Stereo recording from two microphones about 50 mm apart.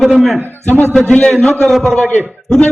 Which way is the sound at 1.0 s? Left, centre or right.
Centre.